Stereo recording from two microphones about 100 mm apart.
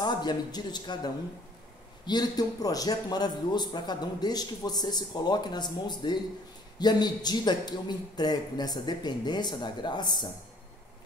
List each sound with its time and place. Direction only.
0.0 s a man's voice: 45° left (ahead or behind)